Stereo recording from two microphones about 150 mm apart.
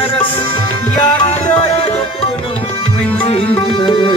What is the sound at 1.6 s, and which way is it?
Music, 40° left (ahead or behind).